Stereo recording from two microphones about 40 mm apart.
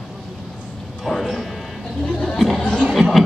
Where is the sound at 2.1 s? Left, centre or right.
Left.